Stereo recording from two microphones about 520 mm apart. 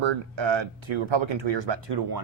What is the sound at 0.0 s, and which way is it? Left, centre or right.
Speech, right.